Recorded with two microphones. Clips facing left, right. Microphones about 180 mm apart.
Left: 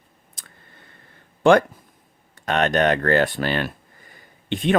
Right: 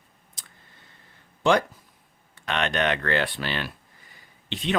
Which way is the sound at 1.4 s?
55° left (ahead or behind).